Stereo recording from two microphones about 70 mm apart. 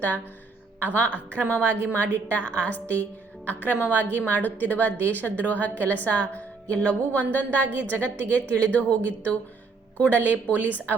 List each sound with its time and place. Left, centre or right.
1.0 s a woman's voice: left